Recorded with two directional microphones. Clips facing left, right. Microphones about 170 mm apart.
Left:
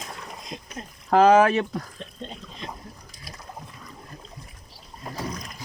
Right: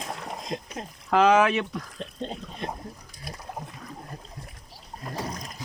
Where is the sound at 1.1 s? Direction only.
40° left (ahead or behind).